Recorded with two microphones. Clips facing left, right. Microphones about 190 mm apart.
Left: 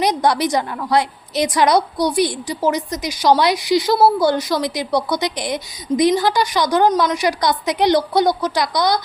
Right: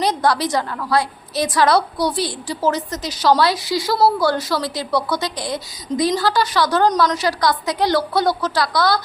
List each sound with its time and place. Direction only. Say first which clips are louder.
0.0 s a woman's voice: left 2 dB; 15° left (ahead or behind)